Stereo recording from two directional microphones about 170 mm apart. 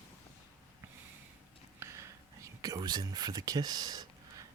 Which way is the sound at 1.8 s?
15° right (ahead or behind).